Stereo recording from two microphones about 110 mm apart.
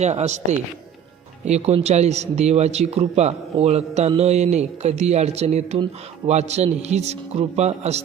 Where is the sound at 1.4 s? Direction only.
80° right.